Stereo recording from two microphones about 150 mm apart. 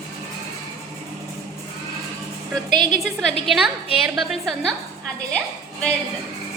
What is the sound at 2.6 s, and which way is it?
Speech, 55° left (ahead or behind).